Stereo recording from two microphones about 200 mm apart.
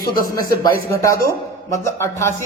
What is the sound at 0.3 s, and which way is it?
A man's voice, 20° left (ahead or behind).